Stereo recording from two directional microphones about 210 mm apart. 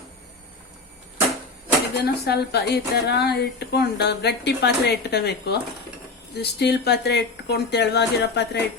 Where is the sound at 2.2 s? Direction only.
50° left (ahead or behind).